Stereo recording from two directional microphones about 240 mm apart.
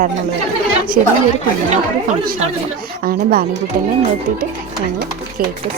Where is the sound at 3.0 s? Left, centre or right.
Right.